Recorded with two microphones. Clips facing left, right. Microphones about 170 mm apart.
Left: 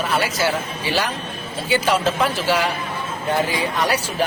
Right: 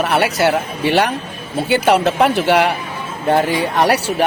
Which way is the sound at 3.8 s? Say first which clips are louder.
Right 7 dB; 70° right (ahead or behind).